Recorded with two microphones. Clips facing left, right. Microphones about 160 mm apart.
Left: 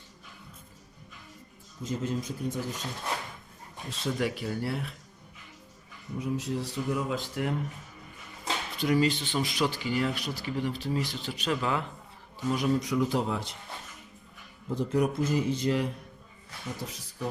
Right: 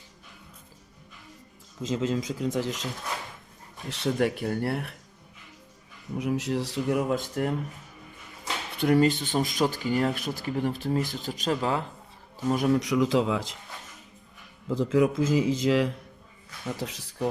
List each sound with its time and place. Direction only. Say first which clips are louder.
1.8 s speech: right 4 dB; 90° right
3.8 s speech: right 5 dB; 65° right (ahead or behind)
6.1 s speech: right 4 dB; 75° right (ahead or behind); by 7.5 s 45° right (ahead or behind)
8.8 s speech: right 4 dB; 55° right (ahead or behind); by 11.9 s 35° right (ahead or behind)
12.4 s speech: right 3 dB; 45° right (ahead or behind); by 13.6 s 90° right
14.7 s speech: right 4 dB; 90° right
16.8 s speech: right 5 dB; 75° right (ahead or behind)